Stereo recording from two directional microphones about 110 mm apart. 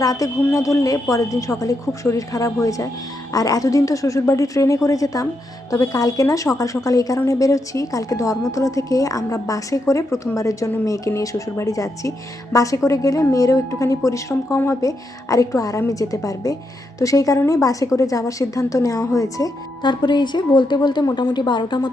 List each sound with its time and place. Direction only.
0.0 s a woman's voice: 30° left (ahead or behind)
19.8 s a woman's voice: 45° left (ahead or behind)